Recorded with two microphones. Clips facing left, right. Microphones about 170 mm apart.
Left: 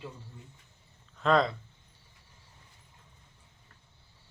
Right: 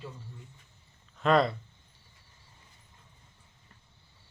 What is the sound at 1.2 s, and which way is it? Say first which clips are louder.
Speech: right 1 dB; 5° right (ahead or behind).